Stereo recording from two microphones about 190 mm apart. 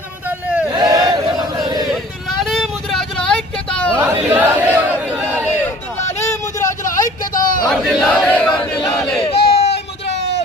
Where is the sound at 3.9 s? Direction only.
10° right (ahead or behind).